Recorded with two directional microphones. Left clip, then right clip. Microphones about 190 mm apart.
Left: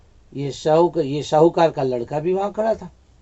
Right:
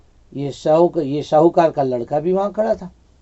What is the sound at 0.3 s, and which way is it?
Speech, 40° right (ahead or behind).